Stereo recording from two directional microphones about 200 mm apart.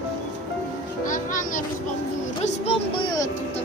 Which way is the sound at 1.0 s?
40° left (ahead or behind).